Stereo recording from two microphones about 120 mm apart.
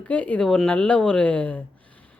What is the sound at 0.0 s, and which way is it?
A woman's voice, 10° left (ahead or behind).